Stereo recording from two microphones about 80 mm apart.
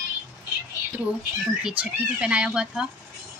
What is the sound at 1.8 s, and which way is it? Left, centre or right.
Speech, centre.